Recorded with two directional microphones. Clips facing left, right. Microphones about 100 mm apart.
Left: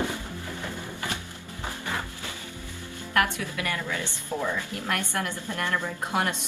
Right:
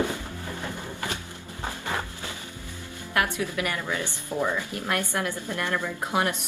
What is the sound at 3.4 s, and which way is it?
Speech, 20° right (ahead or behind).